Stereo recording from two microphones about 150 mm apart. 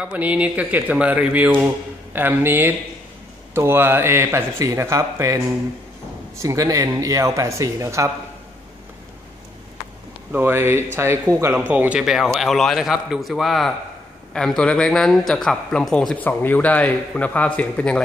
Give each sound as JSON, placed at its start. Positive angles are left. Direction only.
{"t": 0.0, "sound": "speech", "side_deg": -10}
{"t": 10.3, "sound": "speech", "side_deg": -15}